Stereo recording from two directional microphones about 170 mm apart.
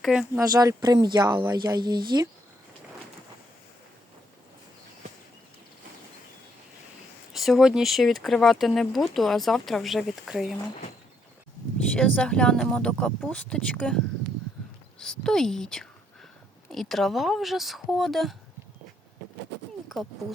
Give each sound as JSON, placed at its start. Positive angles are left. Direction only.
{"t": 0.0, "sound": "speech", "side_deg": -5}
{"t": 0.3, "sound": "speech", "side_deg": -20}
{"t": 7.3, "sound": "speech", "side_deg": 0}
{"t": 11.9, "sound": "speech", "side_deg": 5}
{"t": 19.9, "sound": "speech", "side_deg": 0}